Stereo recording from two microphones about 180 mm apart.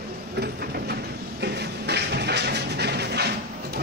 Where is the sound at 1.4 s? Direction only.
65° right (ahead or behind).